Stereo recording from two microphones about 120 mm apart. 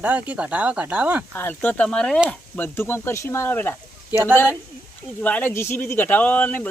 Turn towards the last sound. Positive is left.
turn(degrees=15)  # may be behind; listen again after turning